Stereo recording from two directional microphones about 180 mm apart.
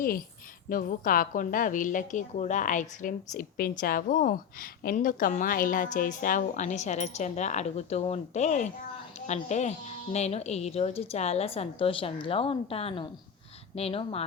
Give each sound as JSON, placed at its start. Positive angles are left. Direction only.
{"t": 0.7, "sound": "a woman's voice", "side_deg": 50}